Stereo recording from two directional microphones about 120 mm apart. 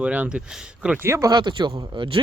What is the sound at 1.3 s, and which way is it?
Speech, 40° right (ahead or behind).